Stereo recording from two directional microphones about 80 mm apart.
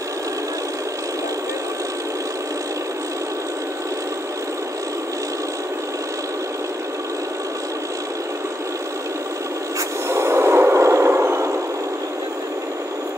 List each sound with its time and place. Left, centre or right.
10.0 s vehicle: right